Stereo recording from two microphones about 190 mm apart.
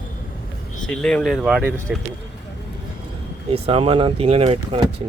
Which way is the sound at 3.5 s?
30° right (ahead or behind).